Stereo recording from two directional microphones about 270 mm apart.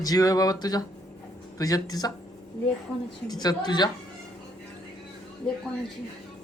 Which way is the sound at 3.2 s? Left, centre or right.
Centre.